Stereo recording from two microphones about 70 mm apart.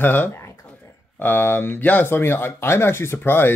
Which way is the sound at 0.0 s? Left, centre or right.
Left.